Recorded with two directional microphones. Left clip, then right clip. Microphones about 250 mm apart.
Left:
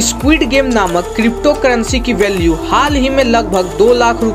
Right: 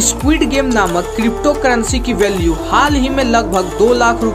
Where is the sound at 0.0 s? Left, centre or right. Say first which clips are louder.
Left 2 dB; centre.